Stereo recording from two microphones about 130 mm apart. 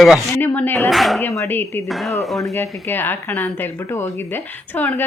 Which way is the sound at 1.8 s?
Centre (ahead or behind).